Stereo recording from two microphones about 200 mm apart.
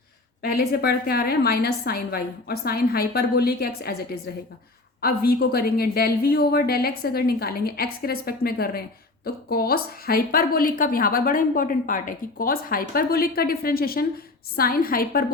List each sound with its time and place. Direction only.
0.4 s a woman's voice: 50° left (ahead or behind)